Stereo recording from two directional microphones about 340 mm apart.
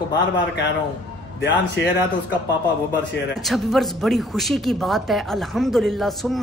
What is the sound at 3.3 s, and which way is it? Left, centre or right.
A woman's voice, centre.